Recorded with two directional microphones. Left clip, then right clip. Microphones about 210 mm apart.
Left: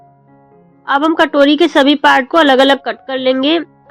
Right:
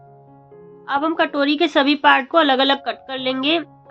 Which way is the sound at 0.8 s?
30° left (ahead or behind).